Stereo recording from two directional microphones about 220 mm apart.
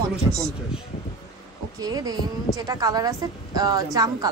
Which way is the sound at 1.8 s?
15° right (ahead or behind).